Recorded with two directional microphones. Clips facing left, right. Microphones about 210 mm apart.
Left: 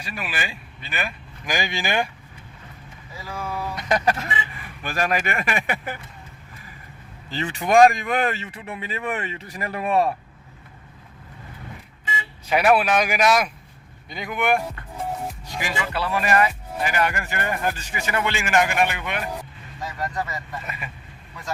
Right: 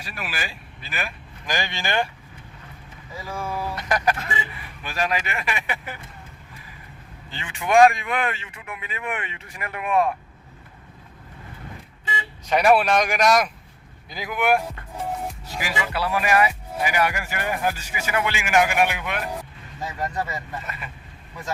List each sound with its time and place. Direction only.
0.0 s speech: centre (ahead or behind)
1.5 s speech: 10° left (ahead or behind)
3.2 s speech: 5° right (ahead or behind)
3.8 s chicken: 25° left (ahead or behind)
4.8 s speech: 50° left (ahead or behind)
7.3 s speech: 40° left (ahead or behind)
12.5 s speech: 5° left (ahead or behind)
20.7 s speech: 15° left (ahead or behind)